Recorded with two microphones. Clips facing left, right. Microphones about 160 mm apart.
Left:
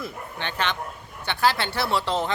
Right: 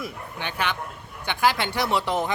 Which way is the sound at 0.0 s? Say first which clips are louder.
Even; 10° right (ahead or behind).